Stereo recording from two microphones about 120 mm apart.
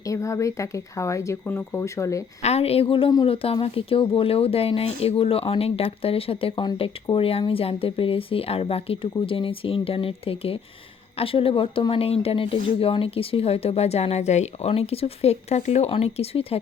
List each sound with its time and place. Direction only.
0.0 s speech: 25° left (ahead or behind)
2.4 s speech: 60° left (ahead or behind)
14.7 s speech: 55° left (ahead or behind)